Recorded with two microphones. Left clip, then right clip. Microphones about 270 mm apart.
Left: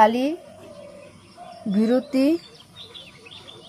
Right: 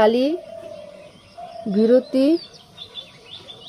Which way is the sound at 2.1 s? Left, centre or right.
Left.